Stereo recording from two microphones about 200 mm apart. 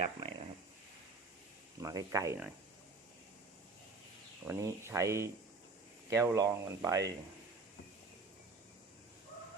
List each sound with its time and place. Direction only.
0.0 s a sound: 25° right (ahead or behind)
1.8 s speech: 15° right (ahead or behind)
4.4 s speech: 15° right (ahead or behind)